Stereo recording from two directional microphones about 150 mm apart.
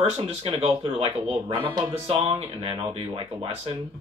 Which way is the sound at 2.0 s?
40° right (ahead or behind).